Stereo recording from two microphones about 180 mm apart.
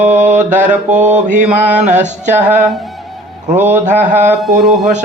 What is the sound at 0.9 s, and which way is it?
Mantra, 40° right (ahead or behind).